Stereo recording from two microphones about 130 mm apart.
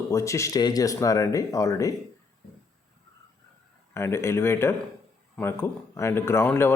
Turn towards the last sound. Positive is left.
turn(degrees=20)  # may be behind; listen again after turning